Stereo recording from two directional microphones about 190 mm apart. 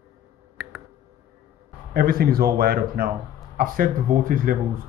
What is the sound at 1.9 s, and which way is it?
Speech, 50° right (ahead or behind).